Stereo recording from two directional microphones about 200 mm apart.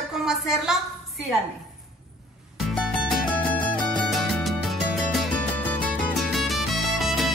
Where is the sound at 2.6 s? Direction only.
Centre (ahead or behind).